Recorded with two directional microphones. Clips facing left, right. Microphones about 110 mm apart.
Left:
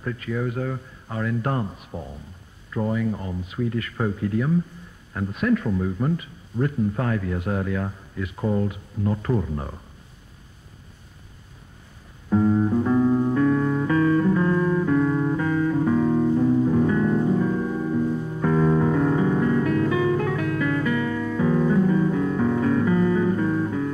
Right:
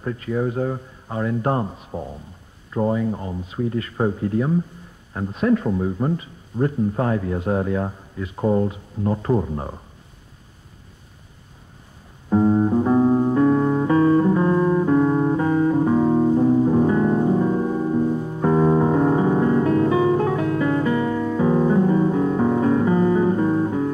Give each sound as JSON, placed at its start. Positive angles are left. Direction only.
{"t": 0.0, "sound": "speech", "side_deg": -30}
{"t": 12.3, "sound": "music", "side_deg": -30}